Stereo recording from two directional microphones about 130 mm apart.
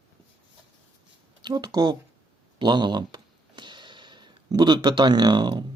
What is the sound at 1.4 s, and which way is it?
Speech, 30° right (ahead or behind).